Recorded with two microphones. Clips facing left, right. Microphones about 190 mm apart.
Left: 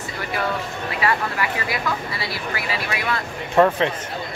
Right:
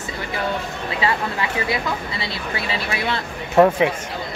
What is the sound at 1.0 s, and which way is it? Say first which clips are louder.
Speech: even; 25° right (ahead or behind).